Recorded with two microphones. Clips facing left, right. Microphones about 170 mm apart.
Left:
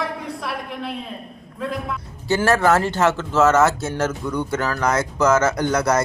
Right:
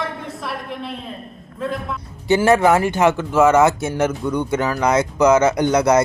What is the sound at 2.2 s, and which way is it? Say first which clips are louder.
Speech: right 3 dB; 15° right (ahead or behind).